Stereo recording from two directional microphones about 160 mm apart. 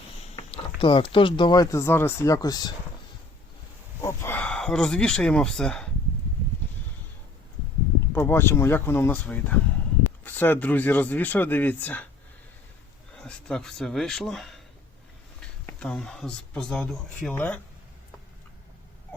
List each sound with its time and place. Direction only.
0.5 s speech: 30° left (ahead or behind)
4.0 s speech: 15° left (ahead or behind)
8.1 s speech: 15° left (ahead or behind)
13.1 s speech: 5° left (ahead or behind)